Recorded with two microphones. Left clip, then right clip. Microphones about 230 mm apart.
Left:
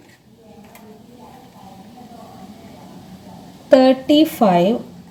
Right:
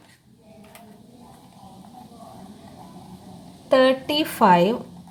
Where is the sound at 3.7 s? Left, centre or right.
Right.